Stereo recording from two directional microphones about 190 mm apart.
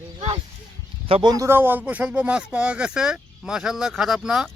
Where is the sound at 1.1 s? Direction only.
30° right (ahead or behind).